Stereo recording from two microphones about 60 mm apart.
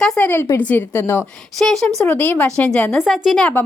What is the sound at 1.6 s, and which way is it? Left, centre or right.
Speech, centre.